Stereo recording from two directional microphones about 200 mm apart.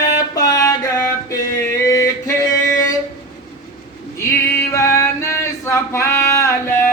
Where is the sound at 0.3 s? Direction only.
15° left (ahead or behind).